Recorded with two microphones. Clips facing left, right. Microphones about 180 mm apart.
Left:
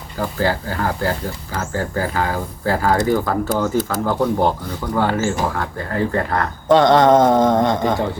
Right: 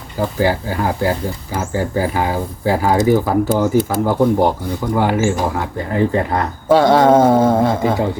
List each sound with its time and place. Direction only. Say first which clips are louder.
0.2 s speech: right 3 dB; 15° right (ahead or behind)